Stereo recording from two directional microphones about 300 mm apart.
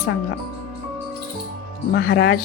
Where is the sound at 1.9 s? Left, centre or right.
Left.